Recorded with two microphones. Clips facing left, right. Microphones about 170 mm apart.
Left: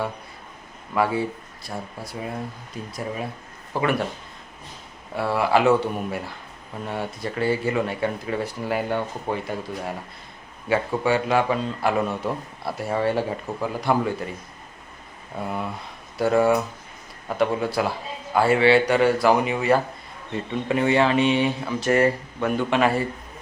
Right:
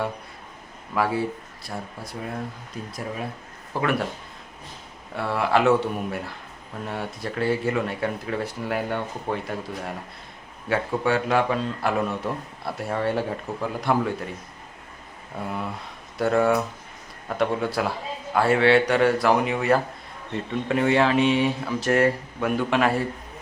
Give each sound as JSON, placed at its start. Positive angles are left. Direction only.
{"t": 0.9, "sound": "a man's voice", "side_deg": 0}
{"t": 5.1, "sound": "a man's voice", "side_deg": 5}
{"t": 16.1, "sound": "a man's voice", "side_deg": 5}